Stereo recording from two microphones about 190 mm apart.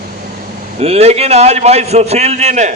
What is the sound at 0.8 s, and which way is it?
A man's voice, 30° right (ahead or behind).